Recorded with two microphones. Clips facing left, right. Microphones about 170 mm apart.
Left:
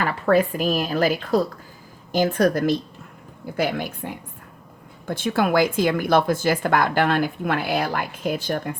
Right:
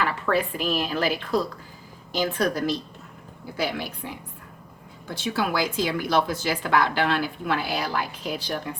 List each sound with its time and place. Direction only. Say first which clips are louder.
0.0 s speech: left 5 dB; 45° left (ahead or behind)